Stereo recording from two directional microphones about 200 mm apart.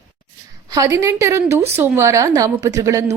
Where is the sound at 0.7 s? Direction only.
15° right (ahead or behind).